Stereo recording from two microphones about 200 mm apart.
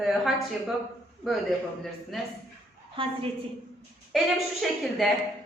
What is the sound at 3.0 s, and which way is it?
Speech, 25° right (ahead or behind).